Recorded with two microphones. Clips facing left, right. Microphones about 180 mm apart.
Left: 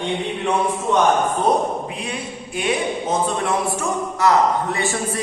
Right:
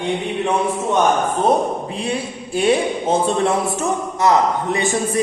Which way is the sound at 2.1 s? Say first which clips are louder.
Right 5 dB; 30° right (ahead or behind).